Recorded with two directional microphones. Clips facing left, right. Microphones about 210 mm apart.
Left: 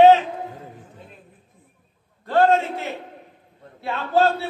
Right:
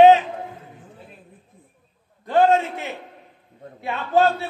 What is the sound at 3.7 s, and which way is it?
Speech, 15° right (ahead or behind).